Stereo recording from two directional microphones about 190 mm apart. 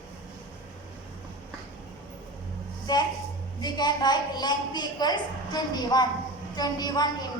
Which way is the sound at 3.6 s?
20° left (ahead or behind).